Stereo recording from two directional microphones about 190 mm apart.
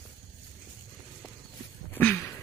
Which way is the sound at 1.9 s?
10° left (ahead or behind).